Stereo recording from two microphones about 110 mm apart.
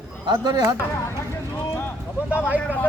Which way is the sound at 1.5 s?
20° left (ahead or behind).